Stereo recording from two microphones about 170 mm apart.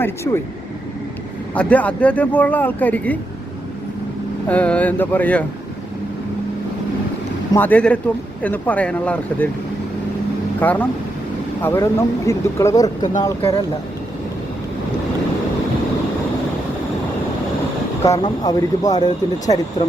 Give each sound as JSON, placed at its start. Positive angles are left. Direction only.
{"t": 0.3, "sound": "speech", "side_deg": 20}
{"t": 1.5, "sound": "speech", "side_deg": 10}
{"t": 4.4, "sound": "speech", "side_deg": 10}
{"t": 7.5, "sound": "speech", "side_deg": 10}
{"t": 10.6, "sound": "speech", "side_deg": 10}
{"t": 18.0, "sound": "speech", "side_deg": 20}